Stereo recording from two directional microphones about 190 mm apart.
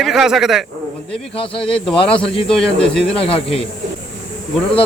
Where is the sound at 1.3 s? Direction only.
30° left (ahead or behind).